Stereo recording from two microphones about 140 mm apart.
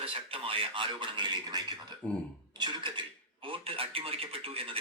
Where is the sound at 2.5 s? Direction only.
35° right (ahead or behind).